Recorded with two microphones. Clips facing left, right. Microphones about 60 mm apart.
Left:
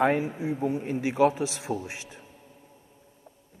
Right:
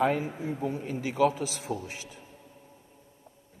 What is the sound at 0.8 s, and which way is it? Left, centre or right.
A man's voice, left.